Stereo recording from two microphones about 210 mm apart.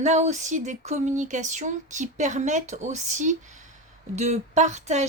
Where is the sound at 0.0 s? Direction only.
35° right (ahead or behind).